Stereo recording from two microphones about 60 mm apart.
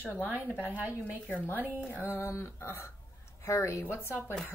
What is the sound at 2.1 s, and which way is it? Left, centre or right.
A woman's voice, left.